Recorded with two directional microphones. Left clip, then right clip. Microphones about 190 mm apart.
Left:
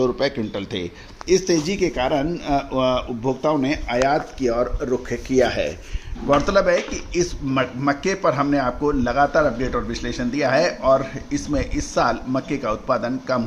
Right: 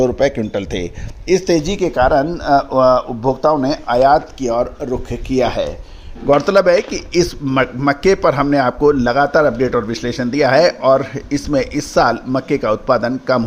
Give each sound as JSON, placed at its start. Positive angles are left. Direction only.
{"t": 0.0, "sound": "a man's voice", "side_deg": -55}